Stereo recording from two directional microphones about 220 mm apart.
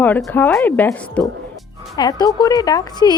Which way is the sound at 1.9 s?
20° left (ahead or behind).